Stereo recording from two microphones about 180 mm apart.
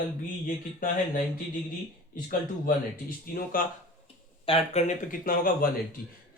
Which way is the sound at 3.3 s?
55° left (ahead or behind).